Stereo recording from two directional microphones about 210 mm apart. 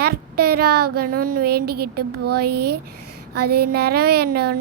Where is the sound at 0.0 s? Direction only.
50° right (ahead or behind).